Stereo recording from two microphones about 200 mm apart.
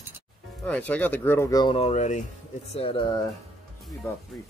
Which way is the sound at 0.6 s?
5° left (ahead or behind).